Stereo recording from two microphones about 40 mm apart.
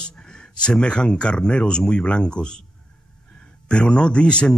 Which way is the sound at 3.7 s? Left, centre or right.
Left.